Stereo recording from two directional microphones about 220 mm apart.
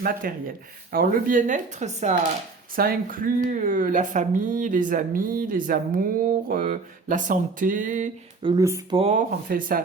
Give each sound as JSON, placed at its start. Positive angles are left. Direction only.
{"t": 0.0, "sound": "speech", "side_deg": -40}
{"t": 8.4, "sound": "speech", "side_deg": -20}
{"t": 9.0, "sound": "speech", "side_deg": -30}